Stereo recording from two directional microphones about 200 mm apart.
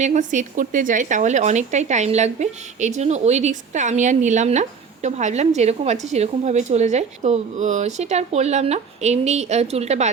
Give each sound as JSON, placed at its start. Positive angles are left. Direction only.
{"t": 0.0, "sound": "a woman's voice", "side_deg": -40}